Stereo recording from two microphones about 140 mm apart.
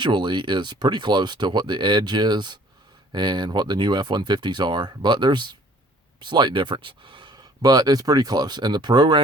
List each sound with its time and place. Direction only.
0.0 s speech: 35° right (ahead or behind)